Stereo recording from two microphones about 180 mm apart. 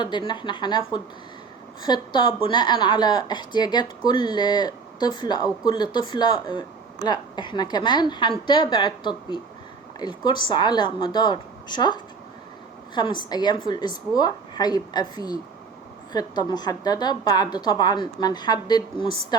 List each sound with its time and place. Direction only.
0.0 s speech: 25° left (ahead or behind)